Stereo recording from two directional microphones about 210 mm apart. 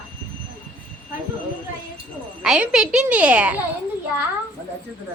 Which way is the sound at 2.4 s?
5° right (ahead or behind).